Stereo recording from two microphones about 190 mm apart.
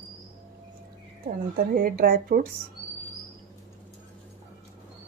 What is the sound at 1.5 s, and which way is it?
Speech, 50° right (ahead or behind).